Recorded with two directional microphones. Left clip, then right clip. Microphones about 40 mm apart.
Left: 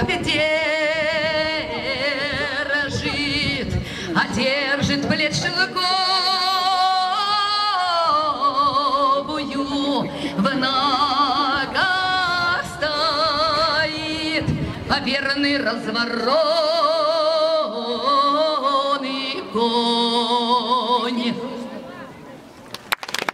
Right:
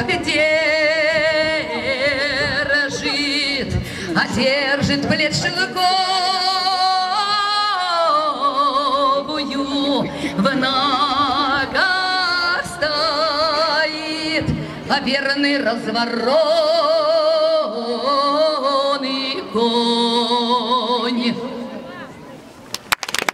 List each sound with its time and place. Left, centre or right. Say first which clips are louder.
0.4 s singing: right 5 dB; centre
0.7 s music: right 4 dB; centre
3.1 s singing: right 3 dB; right
4.2 s music: right 3 dB; centre
7.7 s singing: right 2 dB; centre
10.4 s music: right 2 dB; centre
14.9 s a sound: right 3 dB; centre
19.5 s music: right 2 dB; centre
22.8 s crushing: right 4 dB; right